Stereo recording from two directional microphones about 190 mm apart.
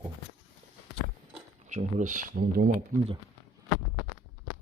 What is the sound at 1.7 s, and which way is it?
Speech, 40° right (ahead or behind).